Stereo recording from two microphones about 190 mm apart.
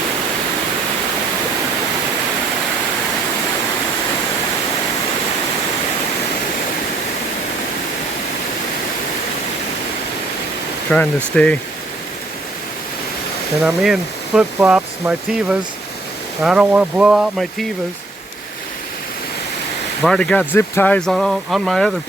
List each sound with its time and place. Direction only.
10.9 s speech: 5° left (ahead or behind)
13.6 s speech: centre (ahead or behind)
20.0 s speech: 5° left (ahead or behind)